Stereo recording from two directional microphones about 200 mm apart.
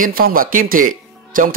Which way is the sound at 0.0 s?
45° right (ahead or behind).